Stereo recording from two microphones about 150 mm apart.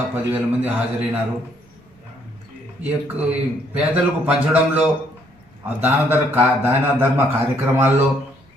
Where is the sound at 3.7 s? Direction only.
10° right (ahead or behind).